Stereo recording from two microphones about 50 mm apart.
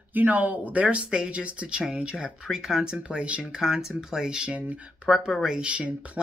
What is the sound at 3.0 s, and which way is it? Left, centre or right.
Speech, right.